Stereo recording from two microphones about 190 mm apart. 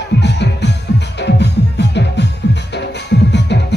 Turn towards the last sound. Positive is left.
turn(degrees=65)  # may be behind; listen again after turning